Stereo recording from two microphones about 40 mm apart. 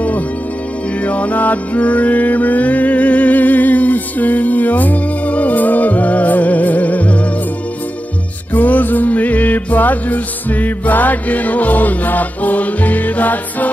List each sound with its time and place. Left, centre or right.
1.0 s music: left
8.5 s music: left